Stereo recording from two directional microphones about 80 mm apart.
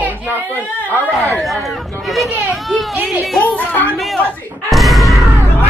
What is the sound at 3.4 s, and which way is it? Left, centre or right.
Speech, centre.